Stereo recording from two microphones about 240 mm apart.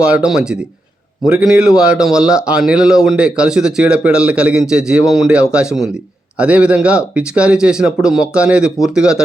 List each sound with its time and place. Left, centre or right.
0.0 s a man's voice: centre